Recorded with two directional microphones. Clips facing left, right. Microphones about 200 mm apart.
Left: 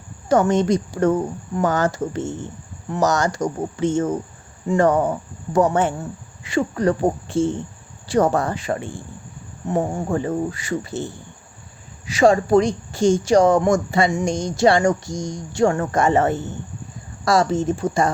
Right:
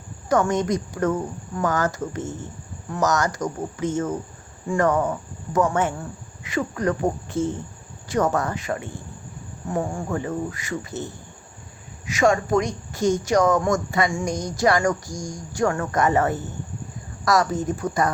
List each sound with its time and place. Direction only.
0.3 s speech: 30° left (ahead or behind)